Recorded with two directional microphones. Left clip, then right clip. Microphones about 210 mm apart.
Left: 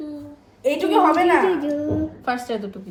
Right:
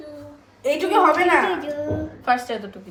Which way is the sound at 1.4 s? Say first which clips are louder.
Left 2 dB; 15° left (ahead or behind).